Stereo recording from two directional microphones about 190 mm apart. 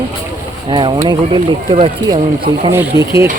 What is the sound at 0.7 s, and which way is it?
Speech, 25° right (ahead or behind).